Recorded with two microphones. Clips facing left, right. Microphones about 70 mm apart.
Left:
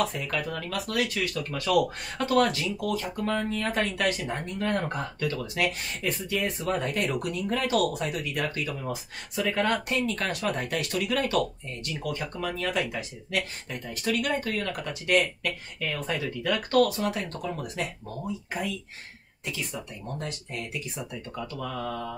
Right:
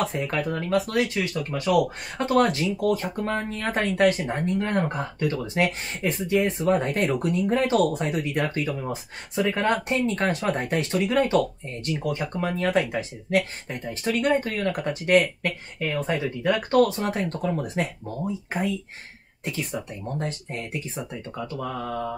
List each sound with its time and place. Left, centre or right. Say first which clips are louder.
0.0 s speech: right 3 dB; right
20.2 s speech: right 4 dB; right